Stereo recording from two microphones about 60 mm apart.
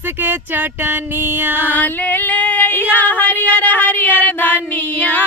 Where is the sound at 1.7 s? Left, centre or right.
Left.